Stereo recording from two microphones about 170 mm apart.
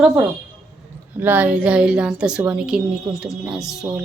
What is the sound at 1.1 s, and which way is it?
A woman's voice, 10° right (ahead or behind).